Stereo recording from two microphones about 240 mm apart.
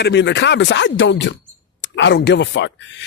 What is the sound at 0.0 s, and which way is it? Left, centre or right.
Speech, left.